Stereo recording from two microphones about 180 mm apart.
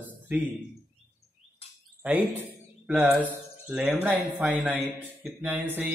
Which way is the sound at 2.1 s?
10° right (ahead or behind).